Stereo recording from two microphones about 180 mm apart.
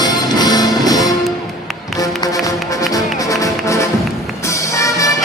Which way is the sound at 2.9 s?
20° left (ahead or behind).